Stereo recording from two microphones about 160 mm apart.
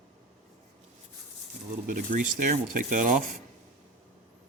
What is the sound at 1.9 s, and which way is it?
Speech, 55° right (ahead or behind).